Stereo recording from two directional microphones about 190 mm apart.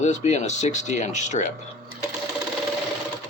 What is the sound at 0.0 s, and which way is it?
Speech, 40° left (ahead or behind).